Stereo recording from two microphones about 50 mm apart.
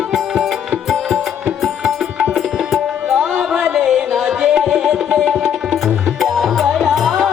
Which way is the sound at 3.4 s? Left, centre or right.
Centre.